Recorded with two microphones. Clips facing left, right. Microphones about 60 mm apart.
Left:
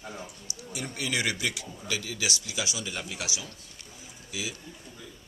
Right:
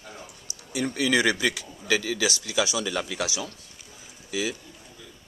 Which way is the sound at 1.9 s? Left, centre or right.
Right.